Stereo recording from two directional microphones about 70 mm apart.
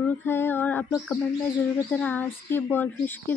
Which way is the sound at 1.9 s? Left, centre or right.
Left.